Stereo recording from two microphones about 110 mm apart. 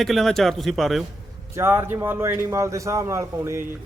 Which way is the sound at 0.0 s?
Centre (ahead or behind).